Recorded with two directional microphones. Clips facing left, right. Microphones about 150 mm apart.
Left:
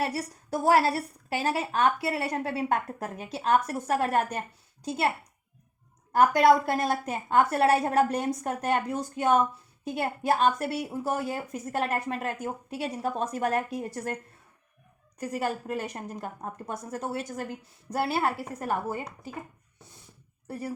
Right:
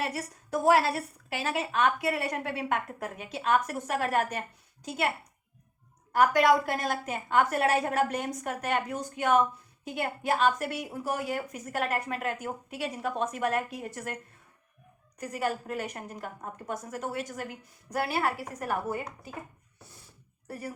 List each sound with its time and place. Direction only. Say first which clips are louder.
0.0 s a woman's voice: left 3 dB; 35° left (ahead or behind)
6.3 s a woman's voice: left 3 dB; 35° left (ahead or behind)
15.3 s a woman's voice: left 1 dB; 30° left (ahead or behind)